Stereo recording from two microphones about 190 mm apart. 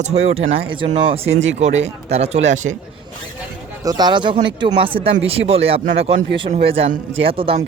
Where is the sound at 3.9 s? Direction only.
20° right (ahead or behind).